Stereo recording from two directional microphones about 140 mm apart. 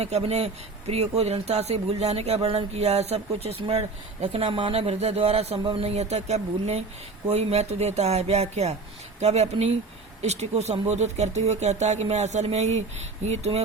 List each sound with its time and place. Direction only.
0.0 s a man's voice: 50° right (ahead or behind)